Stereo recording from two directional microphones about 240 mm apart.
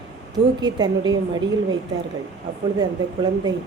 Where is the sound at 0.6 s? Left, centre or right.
Centre.